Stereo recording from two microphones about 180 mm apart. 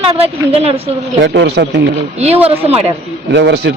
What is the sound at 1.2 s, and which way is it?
Speech, 75° right (ahead or behind).